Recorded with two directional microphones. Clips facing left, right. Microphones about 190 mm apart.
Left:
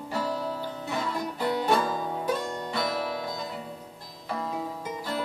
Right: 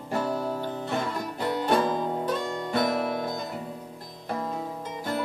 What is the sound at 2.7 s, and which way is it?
Music, 50° right (ahead or behind).